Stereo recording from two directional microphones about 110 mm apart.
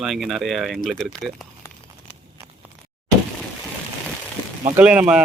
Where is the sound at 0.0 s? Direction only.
5° right (ahead or behind).